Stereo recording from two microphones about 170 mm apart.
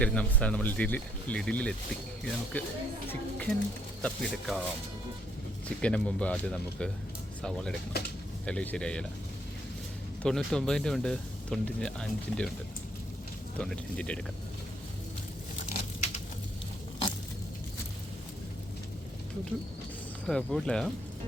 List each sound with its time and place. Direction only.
0.0 s speech: 5° left (ahead or behind)
5.6 s speech: 5° left (ahead or behind)
10.2 s speech: 5° left (ahead or behind)
13.6 s speech: 5° left (ahead or behind)
15.7 s a sound: 40° left (ahead or behind)
20.2 s speech: 5° left (ahead or behind)